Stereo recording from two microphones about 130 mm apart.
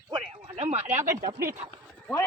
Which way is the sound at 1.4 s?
20° right (ahead or behind).